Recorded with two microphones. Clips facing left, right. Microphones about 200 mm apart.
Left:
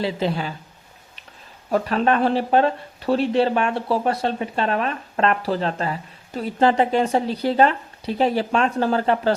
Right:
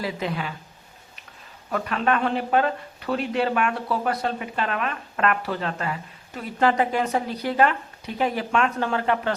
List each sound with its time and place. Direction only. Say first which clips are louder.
0.0 s speech: left 5 dB; 30° left (ahead or behind)
1.7 s speech: left 4 dB; 30° left (ahead or behind)